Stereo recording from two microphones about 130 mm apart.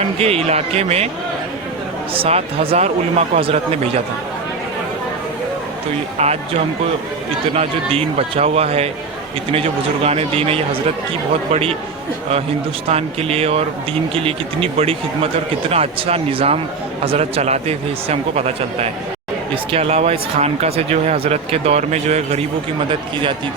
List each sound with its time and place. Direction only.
0.2 s speech: 50° right (ahead or behind)
2.1 s speech: 45° right (ahead or behind)
6.1 s speech: 55° right (ahead or behind)
12.9 s speech: 50° right (ahead or behind)